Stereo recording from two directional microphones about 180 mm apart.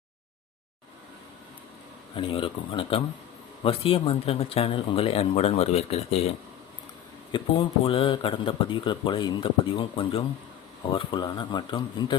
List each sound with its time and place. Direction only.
2.1 s a man's voice: 30° left (ahead or behind)
7.3 s speech: 30° left (ahead or behind)